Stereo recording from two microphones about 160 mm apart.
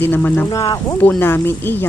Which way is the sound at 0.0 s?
10° left (ahead or behind).